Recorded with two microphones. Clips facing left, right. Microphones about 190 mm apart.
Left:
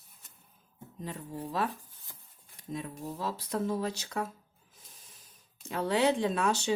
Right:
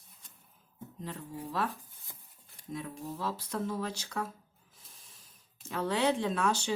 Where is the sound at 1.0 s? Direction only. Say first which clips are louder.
Left 2 dB; 15° left (ahead or behind).